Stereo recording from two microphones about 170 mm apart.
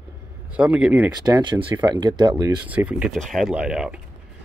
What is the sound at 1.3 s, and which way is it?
Speech, 30° right (ahead or behind).